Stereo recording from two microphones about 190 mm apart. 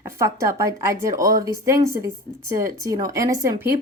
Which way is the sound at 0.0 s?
15° right (ahead or behind).